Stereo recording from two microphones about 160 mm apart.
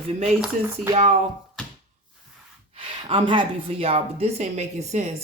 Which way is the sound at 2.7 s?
35° right (ahead or behind).